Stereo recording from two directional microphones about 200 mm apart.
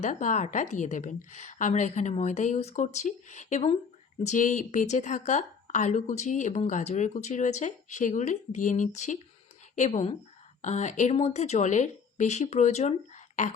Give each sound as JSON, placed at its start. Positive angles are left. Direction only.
{"t": 0.0, "sound": "a woman's voice", "side_deg": 40}